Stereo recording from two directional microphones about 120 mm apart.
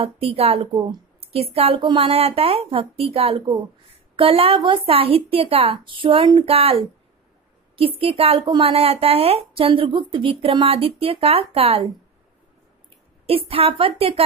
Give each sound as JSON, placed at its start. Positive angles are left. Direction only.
{"t": 0.0, "sound": "a woman's voice", "side_deg": -55}
{"t": 6.5, "sound": "a woman's voice", "side_deg": -55}
{"t": 13.3, "sound": "a woman's voice", "side_deg": -55}